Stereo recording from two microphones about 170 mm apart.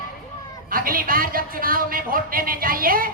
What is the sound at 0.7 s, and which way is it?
A woman's voice, 55° right (ahead or behind).